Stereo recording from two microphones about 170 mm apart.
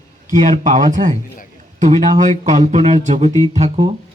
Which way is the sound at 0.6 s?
50° right (ahead or behind).